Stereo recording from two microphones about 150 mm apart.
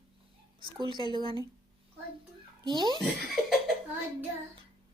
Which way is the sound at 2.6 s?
30° right (ahead or behind).